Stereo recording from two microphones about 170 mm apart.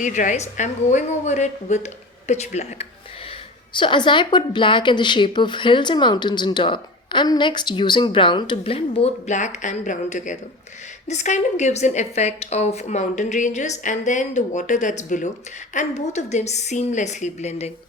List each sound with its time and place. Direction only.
0.0 s a woman's voice: 50° left (ahead or behind)
3.8 s a woman's voice: 30° left (ahead or behind)